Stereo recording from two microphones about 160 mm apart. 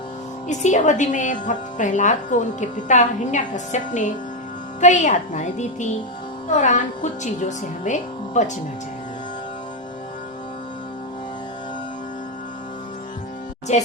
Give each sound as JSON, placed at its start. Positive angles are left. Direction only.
{"t": 0.4, "sound": "a woman's voice", "side_deg": 50}
{"t": 13.7, "sound": "a woman's voice", "side_deg": 45}